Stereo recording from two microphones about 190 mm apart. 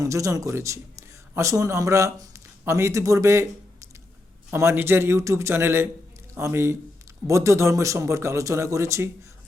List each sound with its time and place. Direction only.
0.0 s a man's voice: 15° right (ahead or behind)